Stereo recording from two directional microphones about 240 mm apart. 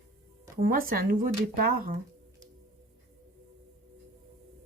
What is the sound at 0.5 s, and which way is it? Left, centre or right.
Speech, right.